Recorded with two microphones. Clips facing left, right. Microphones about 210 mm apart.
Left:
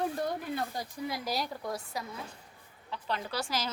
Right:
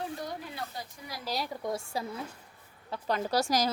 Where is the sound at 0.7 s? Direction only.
45° left (ahead or behind).